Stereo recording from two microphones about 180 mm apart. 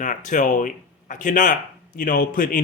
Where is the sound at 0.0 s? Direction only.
45° left (ahead or behind).